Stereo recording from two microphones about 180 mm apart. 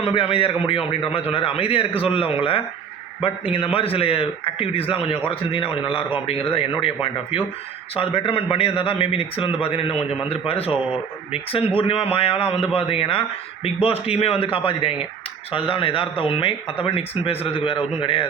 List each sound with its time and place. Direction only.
0.0 s a man's voice: 30° left (ahead or behind)